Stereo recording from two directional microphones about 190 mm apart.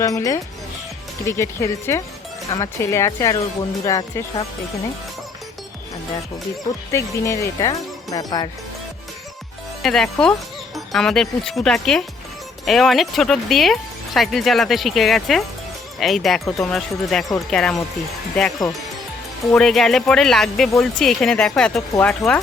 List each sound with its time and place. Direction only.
0.0 s speech: 15° left (ahead or behind)
6.9 s speech: 15° left (ahead or behind)
9.8 s speech: centre (ahead or behind)